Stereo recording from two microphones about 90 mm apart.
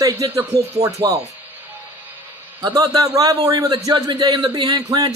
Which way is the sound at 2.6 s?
45° right (ahead or behind).